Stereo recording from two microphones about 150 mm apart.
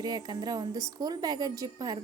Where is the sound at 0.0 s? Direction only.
30° right (ahead or behind).